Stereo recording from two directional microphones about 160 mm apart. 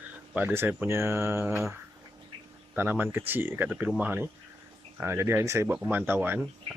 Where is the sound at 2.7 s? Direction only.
10° right (ahead or behind).